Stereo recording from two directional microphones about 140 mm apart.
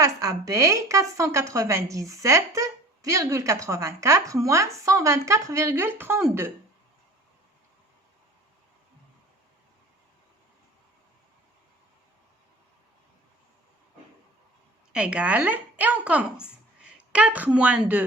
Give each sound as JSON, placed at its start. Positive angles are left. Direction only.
{"t": 0.0, "sound": "speech", "side_deg": -25}
{"t": 14.9, "sound": "a woman's voice", "side_deg": -10}